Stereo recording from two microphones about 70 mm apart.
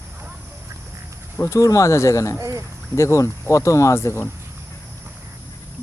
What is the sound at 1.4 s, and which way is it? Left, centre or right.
Speech, left.